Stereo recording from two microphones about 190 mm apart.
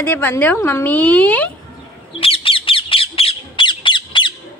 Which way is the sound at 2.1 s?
30° left (ahead or behind).